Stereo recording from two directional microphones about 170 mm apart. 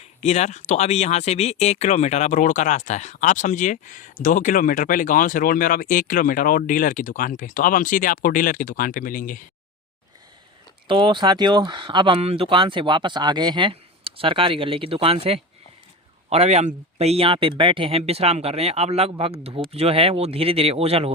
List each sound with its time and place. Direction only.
0.0 s speech: 40° left (ahead or behind)
10.8 s speech: 30° right (ahead or behind)